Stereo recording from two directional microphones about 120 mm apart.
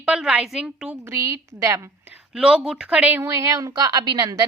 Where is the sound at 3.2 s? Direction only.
25° right (ahead or behind).